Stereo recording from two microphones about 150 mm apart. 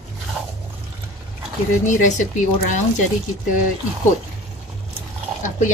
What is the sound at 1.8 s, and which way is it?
Speech, 55° left (ahead or behind).